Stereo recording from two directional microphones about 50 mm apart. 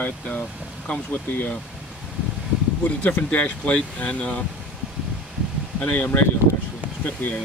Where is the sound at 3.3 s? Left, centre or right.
Left.